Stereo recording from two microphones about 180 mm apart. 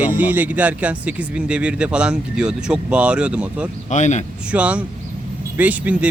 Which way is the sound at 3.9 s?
40° left (ahead or behind).